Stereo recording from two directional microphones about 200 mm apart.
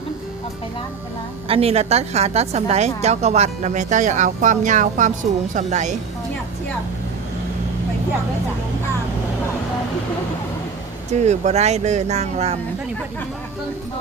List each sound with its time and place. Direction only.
1.5 s a woman's voice: 30° right (ahead or behind)
11.1 s a woman's voice: 35° right (ahead or behind)